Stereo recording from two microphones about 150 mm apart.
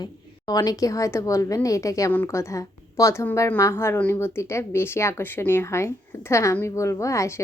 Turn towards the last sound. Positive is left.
turn(degrees=20)  # may be behind; listen again after turning